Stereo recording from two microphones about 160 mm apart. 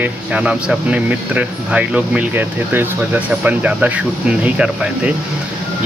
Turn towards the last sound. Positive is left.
turn(degrees=-5)  # may be behind; listen again after turning